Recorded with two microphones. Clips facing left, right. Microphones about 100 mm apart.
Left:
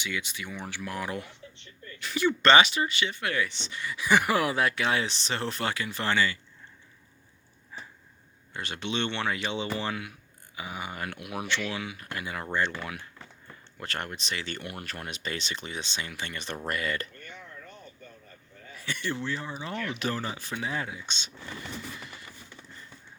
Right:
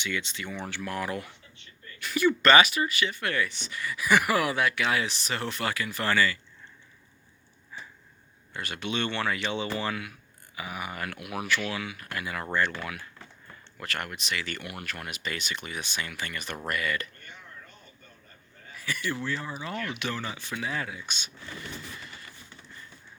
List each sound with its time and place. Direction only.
0.0 s speech: 15° left (ahead or behind)
8.5 s speech: 25° left (ahead or behind)
18.8 s speech: 30° left (ahead or behind)
19.9 s speech: 35° left (ahead or behind)